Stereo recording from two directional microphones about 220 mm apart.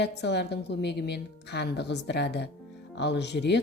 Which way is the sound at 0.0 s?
50° left (ahead or behind).